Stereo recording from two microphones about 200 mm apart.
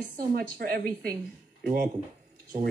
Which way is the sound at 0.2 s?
45° right (ahead or behind).